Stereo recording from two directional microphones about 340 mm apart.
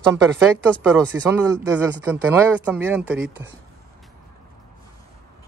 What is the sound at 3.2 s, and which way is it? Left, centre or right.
Speech, right.